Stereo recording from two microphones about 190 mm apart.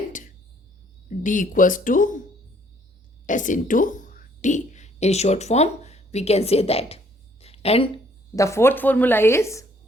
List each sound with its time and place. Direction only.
1.2 s speech: 40° left (ahead or behind)
3.2 s speech: 40° left (ahead or behind)
7.4 s a sound: 30° left (ahead or behind)
8.4 s speech: 15° left (ahead or behind)